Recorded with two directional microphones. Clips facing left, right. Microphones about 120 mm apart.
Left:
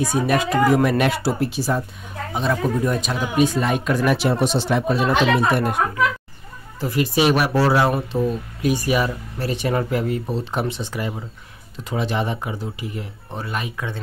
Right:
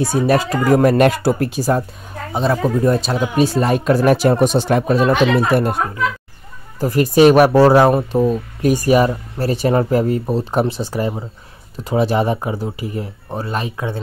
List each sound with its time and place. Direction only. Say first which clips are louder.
0.0 s speech: right 4 dB; 30° right (ahead or behind)
6.8 s speech: right 8 dB; 45° right (ahead or behind)